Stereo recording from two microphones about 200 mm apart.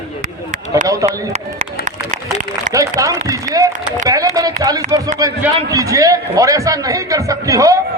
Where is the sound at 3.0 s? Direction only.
15° right (ahead or behind).